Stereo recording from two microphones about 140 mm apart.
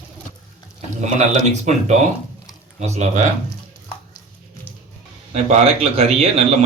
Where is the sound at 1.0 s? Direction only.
55° right (ahead or behind).